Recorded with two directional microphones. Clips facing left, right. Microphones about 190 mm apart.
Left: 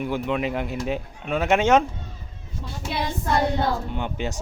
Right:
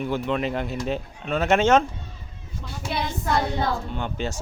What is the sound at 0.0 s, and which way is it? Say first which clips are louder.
Speech: even; 10° left (ahead or behind).